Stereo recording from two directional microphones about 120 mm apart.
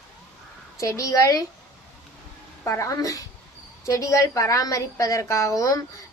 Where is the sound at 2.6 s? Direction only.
25° left (ahead or behind).